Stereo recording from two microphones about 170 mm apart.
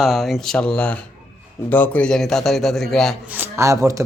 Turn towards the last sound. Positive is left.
turn(degrees=-20)  # may be behind; listen again after turning